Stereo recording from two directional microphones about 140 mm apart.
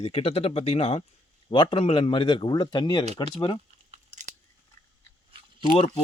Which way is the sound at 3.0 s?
50° right (ahead or behind).